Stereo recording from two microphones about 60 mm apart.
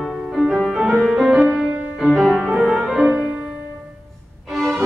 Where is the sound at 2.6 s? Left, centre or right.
Centre.